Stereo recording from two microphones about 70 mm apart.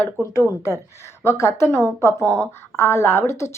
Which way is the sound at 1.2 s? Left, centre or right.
Left.